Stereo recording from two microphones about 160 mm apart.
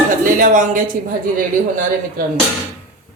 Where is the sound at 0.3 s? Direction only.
55° right (ahead or behind).